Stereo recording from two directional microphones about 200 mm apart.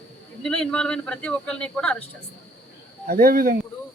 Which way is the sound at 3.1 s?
45° right (ahead or behind).